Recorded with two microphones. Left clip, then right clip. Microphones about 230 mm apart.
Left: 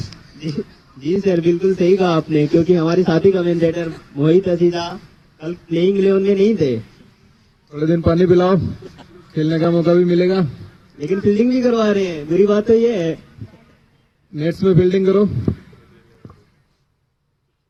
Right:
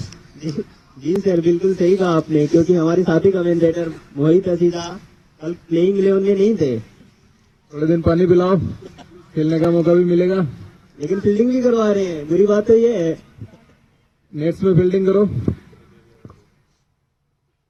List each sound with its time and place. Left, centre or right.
0.3 s a man's voice: left
14.3 s a man's voice: left
16.2 s a sound: left